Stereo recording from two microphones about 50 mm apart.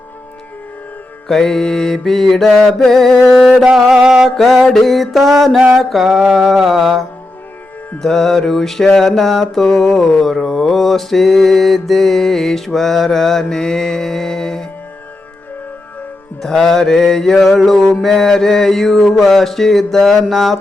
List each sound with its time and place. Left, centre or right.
1.3 s mantra: centre
4.0 s music: centre
4.4 s mantra: centre
6.2 s a sound: centre
6.7 s mantra: centre
7.9 s mantra: centre
16.4 s mantra: centre